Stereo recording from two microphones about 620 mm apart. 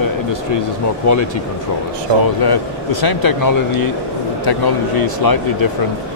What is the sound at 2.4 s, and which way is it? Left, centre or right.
Speech, left.